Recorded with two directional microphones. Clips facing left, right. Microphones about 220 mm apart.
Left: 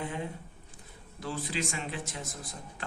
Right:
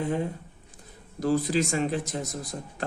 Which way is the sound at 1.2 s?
40° right (ahead or behind).